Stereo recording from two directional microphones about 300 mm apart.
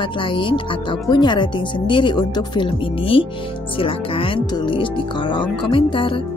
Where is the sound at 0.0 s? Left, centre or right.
Centre.